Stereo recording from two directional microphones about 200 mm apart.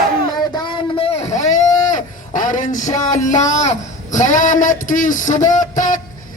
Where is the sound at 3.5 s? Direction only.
35° left (ahead or behind).